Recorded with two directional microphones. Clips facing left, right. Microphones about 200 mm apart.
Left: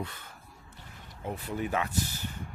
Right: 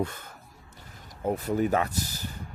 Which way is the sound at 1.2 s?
45° right (ahead or behind).